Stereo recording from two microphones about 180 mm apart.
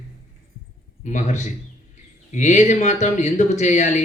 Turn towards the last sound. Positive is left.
turn(degrees=40)  # may be behind; listen again after turning